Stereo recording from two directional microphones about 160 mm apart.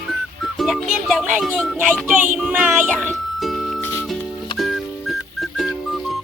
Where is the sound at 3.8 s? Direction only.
15° left (ahead or behind).